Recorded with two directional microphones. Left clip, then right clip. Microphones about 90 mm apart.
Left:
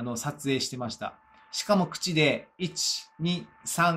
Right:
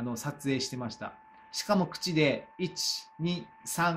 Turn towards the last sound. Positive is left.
turn(degrees=-20)  # may be behind; listen again after turning